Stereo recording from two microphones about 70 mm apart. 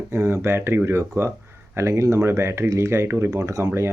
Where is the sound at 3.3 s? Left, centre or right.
Right.